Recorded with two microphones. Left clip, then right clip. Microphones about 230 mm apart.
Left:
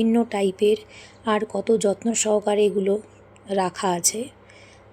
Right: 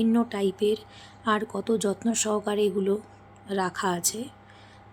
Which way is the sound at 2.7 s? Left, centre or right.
Centre.